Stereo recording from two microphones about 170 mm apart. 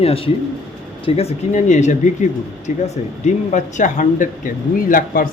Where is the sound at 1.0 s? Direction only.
35° left (ahead or behind).